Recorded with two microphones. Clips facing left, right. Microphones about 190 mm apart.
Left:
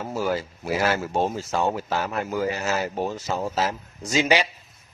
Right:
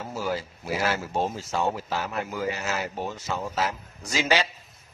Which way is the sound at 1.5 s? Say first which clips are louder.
Left 3 dB; 50° left (ahead or behind).